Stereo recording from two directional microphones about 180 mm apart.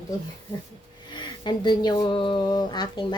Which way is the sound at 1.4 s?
25° left (ahead or behind).